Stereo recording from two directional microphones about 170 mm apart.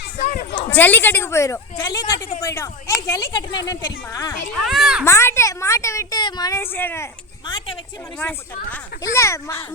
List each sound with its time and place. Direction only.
0.2 s a sound: 55° left (ahead or behind)
0.7 s a woman's voice: 10° left (ahead or behind)
4.5 s a child's voice: centre (ahead or behind)
5.0 s a woman's voice: 15° left (ahead or behind)
7.4 s speech: 25° left (ahead or behind)
8.7 s a woman's voice: 15° left (ahead or behind)